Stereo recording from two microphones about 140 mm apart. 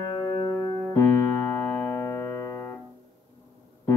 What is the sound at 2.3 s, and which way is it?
Piano, 15° left (ahead or behind).